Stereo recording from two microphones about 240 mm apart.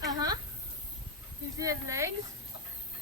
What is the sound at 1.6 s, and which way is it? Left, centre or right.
Speech, centre.